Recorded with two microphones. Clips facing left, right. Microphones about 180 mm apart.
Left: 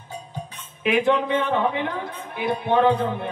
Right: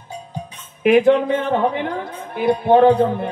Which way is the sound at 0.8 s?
45° right (ahead or behind).